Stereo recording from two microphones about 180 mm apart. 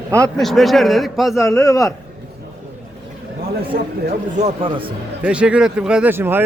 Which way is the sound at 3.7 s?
60° right (ahead or behind).